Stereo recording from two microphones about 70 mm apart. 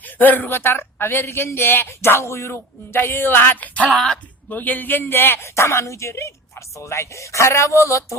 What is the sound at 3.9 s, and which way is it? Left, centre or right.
Speech, centre.